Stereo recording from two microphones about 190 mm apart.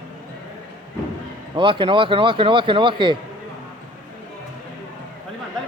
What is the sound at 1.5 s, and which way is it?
Speech, 25° right (ahead or behind).